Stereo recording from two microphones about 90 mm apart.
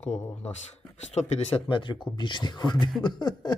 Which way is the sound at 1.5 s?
75° left (ahead or behind).